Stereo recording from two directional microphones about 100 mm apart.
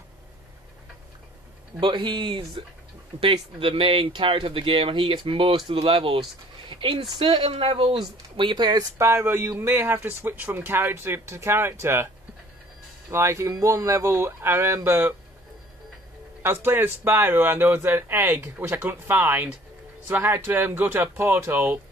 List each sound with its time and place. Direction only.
1.8 s speech: 50° right (ahead or behind)
8.4 s speech: 50° right (ahead or behind)
8.9 s speech: 30° right (ahead or behind)
13.1 s speech: 30° right (ahead or behind)
16.4 s speech: 20° right (ahead or behind)